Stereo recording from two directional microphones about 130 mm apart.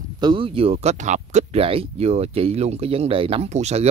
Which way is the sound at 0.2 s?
40° right (ahead or behind).